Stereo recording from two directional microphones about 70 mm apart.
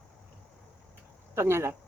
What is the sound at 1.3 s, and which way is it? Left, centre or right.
Speech, right.